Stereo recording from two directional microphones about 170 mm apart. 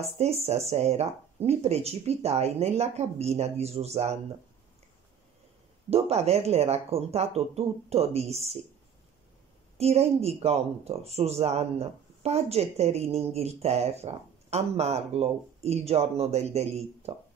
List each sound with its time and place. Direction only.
0.2 s speech: 40° right (ahead or behind)
5.9 s speech: 35° right (ahead or behind)
9.8 s speech: 40° right (ahead or behind)